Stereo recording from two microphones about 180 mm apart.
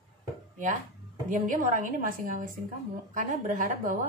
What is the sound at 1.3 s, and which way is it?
A woman's voice, 45° right (ahead or behind).